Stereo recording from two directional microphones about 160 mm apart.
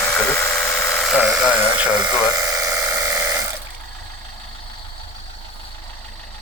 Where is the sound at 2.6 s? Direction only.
20° right (ahead or behind).